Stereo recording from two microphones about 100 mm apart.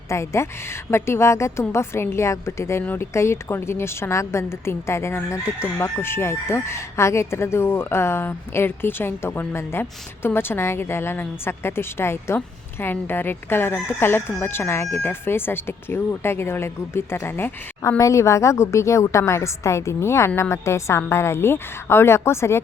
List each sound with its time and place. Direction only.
0.1 s speech: 30° left (ahead or behind)